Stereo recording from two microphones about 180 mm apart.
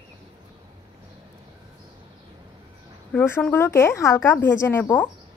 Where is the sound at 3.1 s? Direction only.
10° left (ahead or behind).